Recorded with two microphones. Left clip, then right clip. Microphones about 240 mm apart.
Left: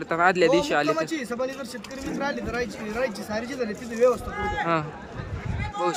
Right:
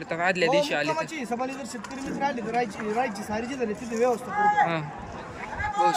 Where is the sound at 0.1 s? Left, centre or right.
Centre.